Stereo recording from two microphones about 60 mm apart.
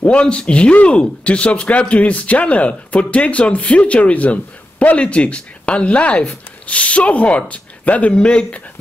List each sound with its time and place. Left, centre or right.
0.1 s speech: centre